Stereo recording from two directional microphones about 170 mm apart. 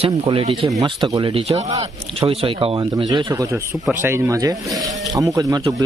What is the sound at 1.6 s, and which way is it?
Speech, 20° right (ahead or behind).